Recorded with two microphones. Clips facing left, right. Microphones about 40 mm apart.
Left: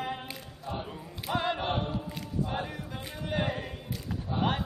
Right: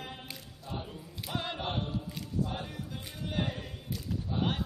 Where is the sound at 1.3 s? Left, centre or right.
Centre.